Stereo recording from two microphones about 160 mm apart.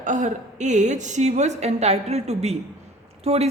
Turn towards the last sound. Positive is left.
turn(degrees=-40)  # may be behind; listen again after turning